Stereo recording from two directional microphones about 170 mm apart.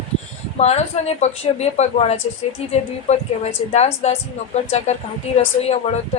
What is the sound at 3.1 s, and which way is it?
Speech, 40° left (ahead or behind).